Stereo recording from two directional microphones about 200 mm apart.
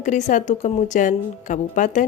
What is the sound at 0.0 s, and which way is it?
A woman's voice, 35° left (ahead or behind).